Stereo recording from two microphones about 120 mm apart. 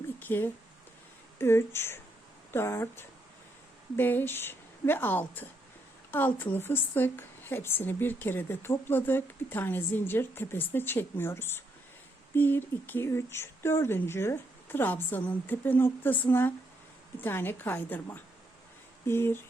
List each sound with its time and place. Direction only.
0.2 s a woman's voice: 15° left (ahead or behind)